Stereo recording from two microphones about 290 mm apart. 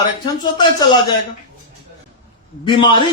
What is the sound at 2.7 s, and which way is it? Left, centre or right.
Speech, centre.